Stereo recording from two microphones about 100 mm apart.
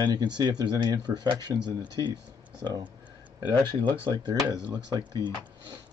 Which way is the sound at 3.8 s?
45° right (ahead or behind).